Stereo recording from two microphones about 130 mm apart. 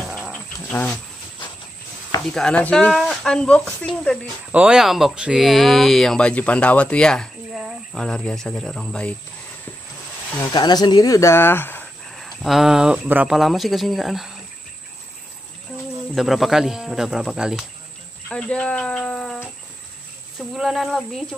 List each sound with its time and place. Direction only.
0.3 s wild animals: 10° left (ahead or behind)
2.3 s speech: 10° left (ahead or behind)
2.9 s speech: centre (ahead or behind)
4.5 s speech: 10° right (ahead or behind)
10.5 s speech: 30° left (ahead or behind); by 11.9 s 15° left (ahead or behind)
12.2 s speech: centre (ahead or behind)
16.2 s speech: centre (ahead or behind)
18.3 s speech: 10° left (ahead or behind)